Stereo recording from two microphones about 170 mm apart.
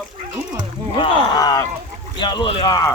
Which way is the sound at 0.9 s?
25° left (ahead or behind).